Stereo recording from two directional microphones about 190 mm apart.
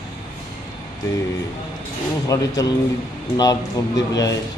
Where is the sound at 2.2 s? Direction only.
20° left (ahead or behind).